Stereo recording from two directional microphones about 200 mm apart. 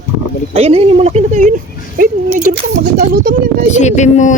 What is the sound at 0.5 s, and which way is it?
Speech, 30° right (ahead or behind).